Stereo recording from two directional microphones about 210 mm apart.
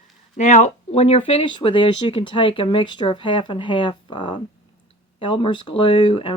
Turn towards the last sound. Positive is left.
turn(degrees=25)  # may be behind; listen again after turning